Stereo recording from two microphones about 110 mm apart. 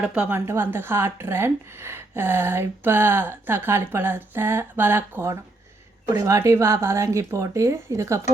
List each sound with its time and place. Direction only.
0.0 s a woman's voice: 10° right (ahead or behind)
0.3 s speech: 25° right (ahead or behind)